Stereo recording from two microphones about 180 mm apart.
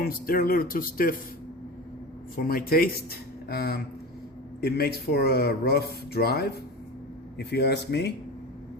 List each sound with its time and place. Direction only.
0.0 s speech: 55° left (ahead or behind)
2.3 s speech: 55° left (ahead or behind)